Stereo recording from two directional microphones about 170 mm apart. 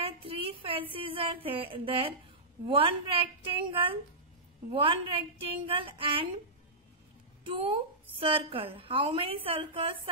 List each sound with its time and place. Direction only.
0.0 s a sound: 30° right (ahead or behind)
0.9 s a woman's voice: 30° right (ahead or behind)
7.4 s a woman's voice: 30° right (ahead or behind)